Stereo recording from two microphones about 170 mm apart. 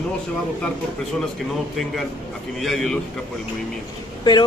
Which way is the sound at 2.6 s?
Centre (ahead or behind).